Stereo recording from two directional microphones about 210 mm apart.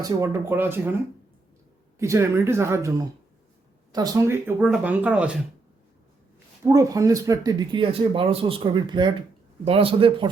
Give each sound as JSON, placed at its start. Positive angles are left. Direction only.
{"t": 0.0, "sound": "speech", "side_deg": -10}
{"t": 2.0, "sound": "speech", "side_deg": -15}
{"t": 3.9, "sound": "speech", "side_deg": -15}
{"t": 6.7, "sound": "speech", "side_deg": -15}